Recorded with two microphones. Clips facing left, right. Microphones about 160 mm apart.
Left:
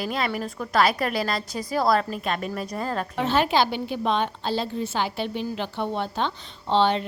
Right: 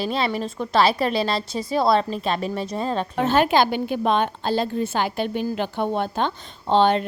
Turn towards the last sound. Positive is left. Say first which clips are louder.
# right 3 dB
turn(degrees=-50)  # may be behind; listen again after turning